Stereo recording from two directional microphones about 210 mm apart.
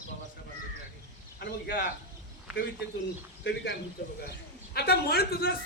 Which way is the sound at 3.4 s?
50° left (ahead or behind).